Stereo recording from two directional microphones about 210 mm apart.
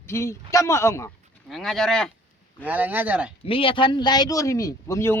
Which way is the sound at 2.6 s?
10° right (ahead or behind).